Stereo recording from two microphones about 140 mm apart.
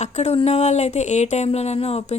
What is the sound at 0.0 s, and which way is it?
A woman's voice, 50° left (ahead or behind).